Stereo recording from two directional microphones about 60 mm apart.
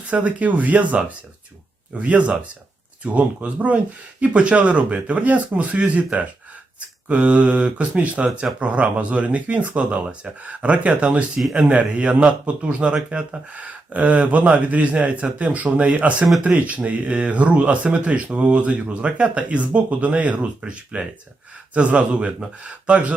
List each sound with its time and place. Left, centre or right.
0.1 s speech: right